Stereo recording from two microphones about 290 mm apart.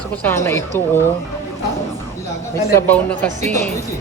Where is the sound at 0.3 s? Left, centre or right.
Centre.